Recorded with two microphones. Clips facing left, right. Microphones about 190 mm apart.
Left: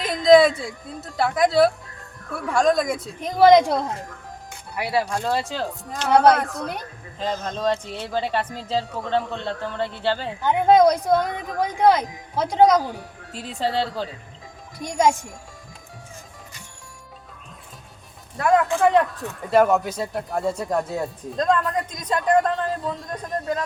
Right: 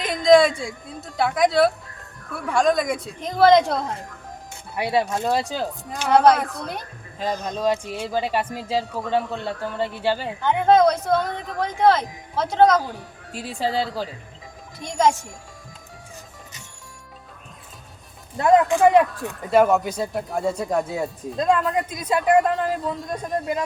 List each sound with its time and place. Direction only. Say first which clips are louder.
0.0 s a woman's voice: left 1 dB; centre (ahead or behind)
4.7 s speech: right 2 dB; 20° right (ahead or behind)
6.1 s speech: even; centre (ahead or behind)
7.2 s speech: right 1 dB; 15° right (ahead or behind)
10.4 s speech: left 1 dB; 10° left (ahead or behind)
13.3 s speech: even; 10° right (ahead or behind)
14.8 s speech: even; 10° left (ahead or behind)
18.3 s speech: right 3 dB; 25° right (ahead or behind)
19.5 s speech: even; centre (ahead or behind)